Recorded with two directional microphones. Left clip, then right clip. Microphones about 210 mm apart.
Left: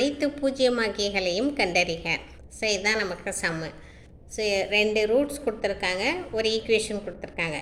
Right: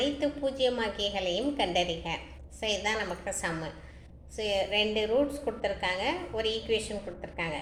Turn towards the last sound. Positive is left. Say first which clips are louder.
# left 5 dB
turn(degrees=45)  # may be behind; listen again after turning